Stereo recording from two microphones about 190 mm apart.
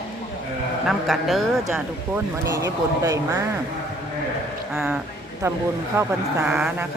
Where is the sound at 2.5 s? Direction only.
15° right (ahead or behind).